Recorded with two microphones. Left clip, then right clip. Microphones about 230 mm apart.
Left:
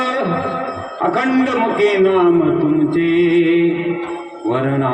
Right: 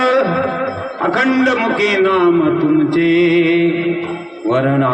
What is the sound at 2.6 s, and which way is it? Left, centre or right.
Music, centre.